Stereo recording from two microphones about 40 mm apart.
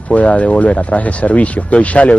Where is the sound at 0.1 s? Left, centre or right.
Left.